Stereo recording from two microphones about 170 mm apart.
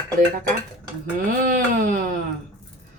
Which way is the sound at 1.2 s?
50° right (ahead or behind).